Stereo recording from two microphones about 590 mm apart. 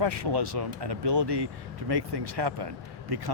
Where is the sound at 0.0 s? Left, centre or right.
Right.